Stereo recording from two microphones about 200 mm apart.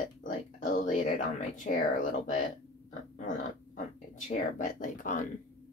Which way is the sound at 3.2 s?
40° left (ahead or behind).